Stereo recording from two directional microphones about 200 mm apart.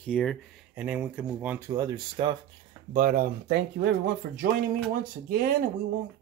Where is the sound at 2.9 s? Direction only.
45° right (ahead or behind).